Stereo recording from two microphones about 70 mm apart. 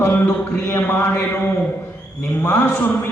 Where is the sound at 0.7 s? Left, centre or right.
Left.